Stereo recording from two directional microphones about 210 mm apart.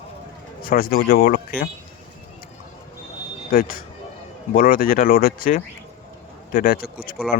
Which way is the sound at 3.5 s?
45° left (ahead or behind).